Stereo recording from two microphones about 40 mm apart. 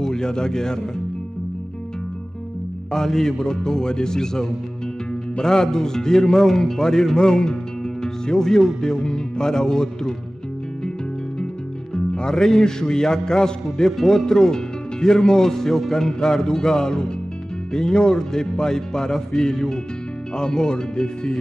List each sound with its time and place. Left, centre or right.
0.0 s a man's voice: centre
2.9 s speech: centre
11.9 s speech: centre
13.8 s speech: centre